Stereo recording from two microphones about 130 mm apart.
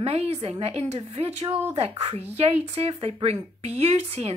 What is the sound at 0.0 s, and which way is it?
Speech, 50° right (ahead or behind).